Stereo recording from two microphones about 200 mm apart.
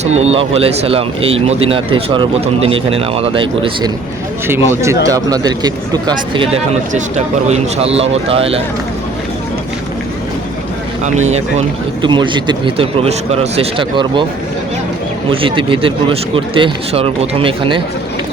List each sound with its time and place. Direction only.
0.0 s speech: 30° right (ahead or behind)
4.4 s a man's voice: 10° right (ahead or behind); by 8.6 s 30° right (ahead or behind)
12.0 s speech: 25° right (ahead or behind)
15.3 s speech: 25° right (ahead or behind)